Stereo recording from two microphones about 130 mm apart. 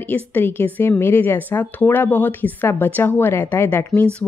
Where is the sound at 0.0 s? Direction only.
15° left (ahead or behind).